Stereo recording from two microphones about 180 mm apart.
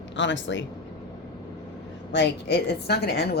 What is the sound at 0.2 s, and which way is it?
Speech, 90° left.